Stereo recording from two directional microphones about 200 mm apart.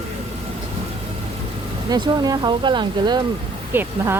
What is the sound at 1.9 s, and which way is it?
Speech, 20° right (ahead or behind).